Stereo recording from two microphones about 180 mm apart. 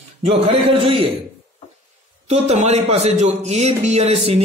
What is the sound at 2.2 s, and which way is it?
A man's voice, 35° right (ahead or behind).